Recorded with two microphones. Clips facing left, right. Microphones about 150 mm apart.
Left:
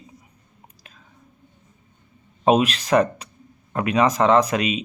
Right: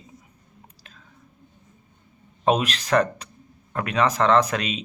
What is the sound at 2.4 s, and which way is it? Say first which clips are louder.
Speech: left 4 dB; 10° left (ahead or behind).